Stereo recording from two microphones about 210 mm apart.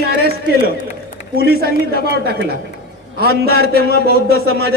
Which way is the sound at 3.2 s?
50° right (ahead or behind).